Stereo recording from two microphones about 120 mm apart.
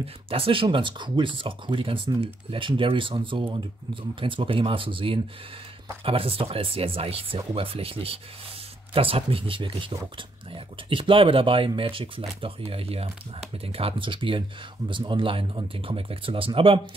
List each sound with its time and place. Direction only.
0.0 s speech: 50° right (ahead or behind)